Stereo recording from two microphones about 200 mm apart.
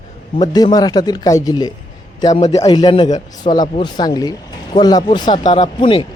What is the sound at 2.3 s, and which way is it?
Speech, 35° left (ahead or behind).